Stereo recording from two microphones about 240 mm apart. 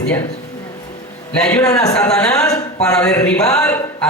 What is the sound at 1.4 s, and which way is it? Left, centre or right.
A woman's voice, centre.